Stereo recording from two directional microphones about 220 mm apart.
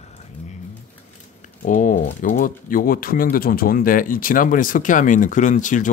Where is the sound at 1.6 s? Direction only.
35° left (ahead or behind).